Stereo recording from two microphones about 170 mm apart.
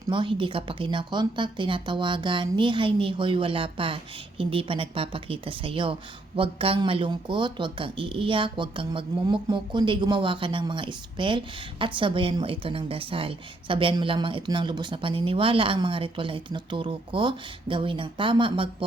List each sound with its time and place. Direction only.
0.1 s speech: 30° right (ahead or behind)